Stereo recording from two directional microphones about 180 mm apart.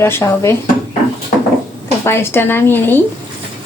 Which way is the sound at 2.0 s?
15° left (ahead or behind).